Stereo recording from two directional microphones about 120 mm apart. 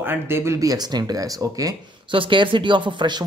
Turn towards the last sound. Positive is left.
turn(degrees=-40)  # may be behind; listen again after turning